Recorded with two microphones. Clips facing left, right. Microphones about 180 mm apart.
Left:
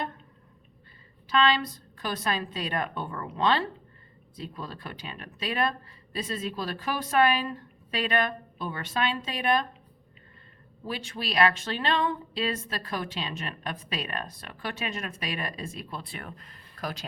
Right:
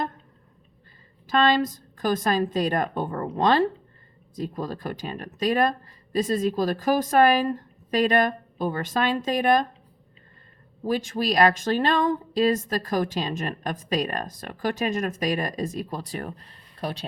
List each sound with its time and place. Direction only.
1.3 s a woman's voice: 45° right (ahead or behind)
10.8 s speech: 45° right (ahead or behind)